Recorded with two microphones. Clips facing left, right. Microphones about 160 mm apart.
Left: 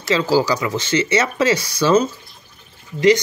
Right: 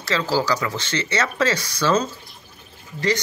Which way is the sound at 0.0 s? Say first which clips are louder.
Left 5 dB; 15° left (ahead or behind).